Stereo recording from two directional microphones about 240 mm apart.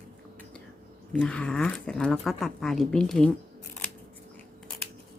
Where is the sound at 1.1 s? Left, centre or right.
Centre.